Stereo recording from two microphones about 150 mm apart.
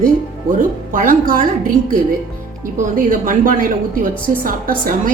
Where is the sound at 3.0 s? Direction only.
65° right (ahead or behind).